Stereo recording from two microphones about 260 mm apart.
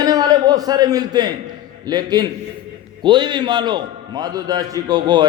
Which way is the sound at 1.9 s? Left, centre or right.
Centre.